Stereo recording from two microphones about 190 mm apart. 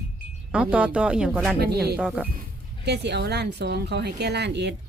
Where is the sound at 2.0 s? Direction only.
5° right (ahead or behind).